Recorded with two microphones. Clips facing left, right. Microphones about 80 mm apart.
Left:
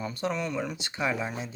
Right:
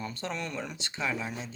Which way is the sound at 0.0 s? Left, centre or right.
Centre.